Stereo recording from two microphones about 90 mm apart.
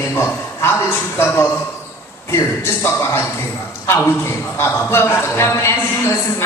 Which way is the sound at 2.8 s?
25° left (ahead or behind).